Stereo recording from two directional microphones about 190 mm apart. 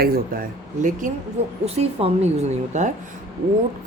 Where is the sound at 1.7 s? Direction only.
35° right (ahead or behind).